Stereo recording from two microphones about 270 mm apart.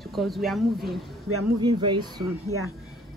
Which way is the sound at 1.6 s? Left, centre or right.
Centre.